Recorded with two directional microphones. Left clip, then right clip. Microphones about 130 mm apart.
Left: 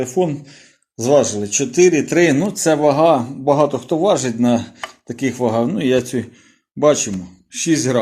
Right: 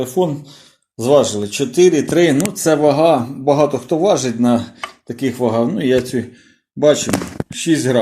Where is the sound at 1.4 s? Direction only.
10° left (ahead or behind).